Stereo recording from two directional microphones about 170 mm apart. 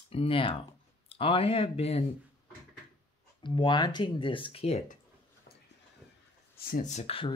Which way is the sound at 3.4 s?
30° left (ahead or behind).